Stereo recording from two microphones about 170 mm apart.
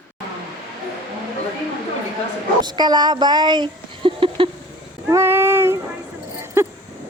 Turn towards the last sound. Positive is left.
turn(degrees=-15)  # may be behind; listen again after turning